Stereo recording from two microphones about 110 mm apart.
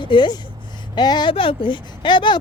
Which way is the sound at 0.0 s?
45° left (ahead or behind).